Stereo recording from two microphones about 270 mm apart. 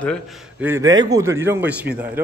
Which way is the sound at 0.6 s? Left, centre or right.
Centre.